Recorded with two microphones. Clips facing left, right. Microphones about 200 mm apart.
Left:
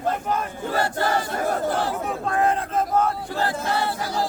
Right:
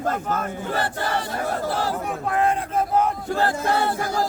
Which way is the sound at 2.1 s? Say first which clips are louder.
Even; 15° right (ahead or behind).